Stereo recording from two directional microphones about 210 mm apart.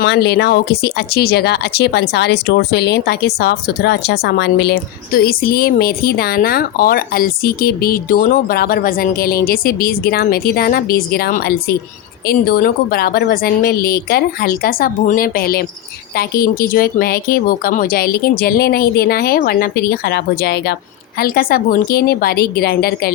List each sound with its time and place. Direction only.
0.0 s speech: 50° left (ahead or behind)